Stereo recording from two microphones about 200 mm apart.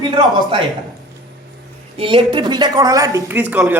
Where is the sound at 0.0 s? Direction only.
20° right (ahead or behind).